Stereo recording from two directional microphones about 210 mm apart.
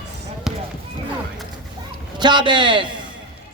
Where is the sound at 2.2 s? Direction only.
20° right (ahead or behind).